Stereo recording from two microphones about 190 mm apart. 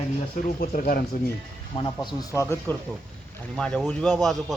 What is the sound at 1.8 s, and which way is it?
Speech, 20° left (ahead or behind).